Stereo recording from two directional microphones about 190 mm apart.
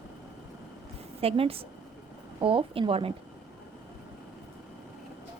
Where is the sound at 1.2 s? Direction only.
30° right (ahead or behind).